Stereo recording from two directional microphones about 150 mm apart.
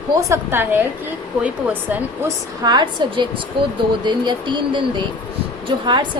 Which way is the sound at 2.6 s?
30° right (ahead or behind).